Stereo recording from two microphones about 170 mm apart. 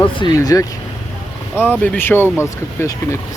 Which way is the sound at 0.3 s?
20° left (ahead or behind).